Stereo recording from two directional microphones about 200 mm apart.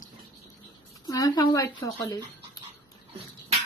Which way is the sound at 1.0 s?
20° left (ahead or behind).